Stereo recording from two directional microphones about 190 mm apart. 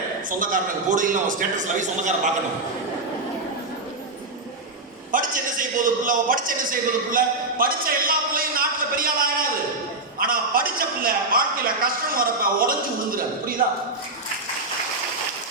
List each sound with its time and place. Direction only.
0.3 s a man's voice: 45° right (ahead or behind)
5.1 s a man's voice: 45° right (ahead or behind)